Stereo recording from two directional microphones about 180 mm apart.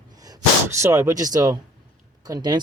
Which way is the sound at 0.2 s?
20° right (ahead or behind).